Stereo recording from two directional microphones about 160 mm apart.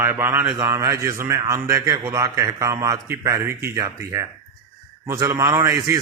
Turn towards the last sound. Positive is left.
turn(degrees=-20)  # may be behind; listen again after turning